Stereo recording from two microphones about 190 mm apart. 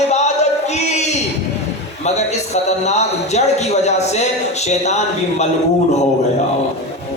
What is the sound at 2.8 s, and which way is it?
Speech, 35° left (ahead or behind).